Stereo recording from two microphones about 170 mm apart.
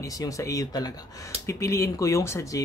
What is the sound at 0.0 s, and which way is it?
Speech, 20° left (ahead or behind).